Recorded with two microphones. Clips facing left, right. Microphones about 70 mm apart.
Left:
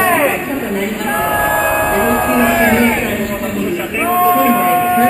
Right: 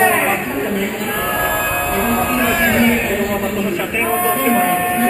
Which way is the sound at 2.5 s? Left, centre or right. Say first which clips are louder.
Left 3 dB; left.